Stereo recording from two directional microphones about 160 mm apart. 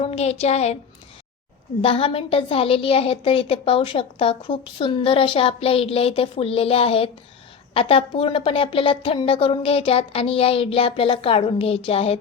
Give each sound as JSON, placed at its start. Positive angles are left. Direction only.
{"t": 0.0, "sound": "a woman's voice", "side_deg": 40}
{"t": 1.8, "sound": "a woman's voice", "side_deg": 35}